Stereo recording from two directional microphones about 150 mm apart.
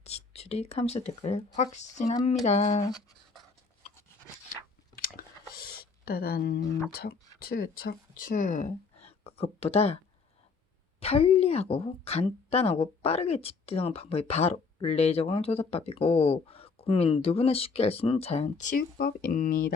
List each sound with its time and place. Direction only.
0.0 s speech: 45° left (ahead or behind)
4.9 s a sound: 75° left (ahead or behind); by 6.6 s 90° left
6.9 s speech: 90° left; by 10.0 s 40° left (ahead or behind)
11.0 s speech: 40° left (ahead or behind); by 19.7 s 70° left (ahead or behind)